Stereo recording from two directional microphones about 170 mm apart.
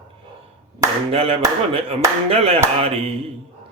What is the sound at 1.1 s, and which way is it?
Speech, 35° right (ahead or behind).